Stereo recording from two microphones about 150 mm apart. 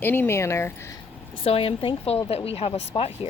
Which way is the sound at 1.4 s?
40° left (ahead or behind).